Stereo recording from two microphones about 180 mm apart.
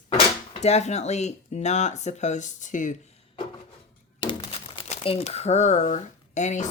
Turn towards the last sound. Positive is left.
turn(degrees=40)  # may be behind; listen again after turning